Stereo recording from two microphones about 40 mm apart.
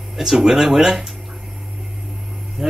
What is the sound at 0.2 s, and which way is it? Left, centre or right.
Speech, centre.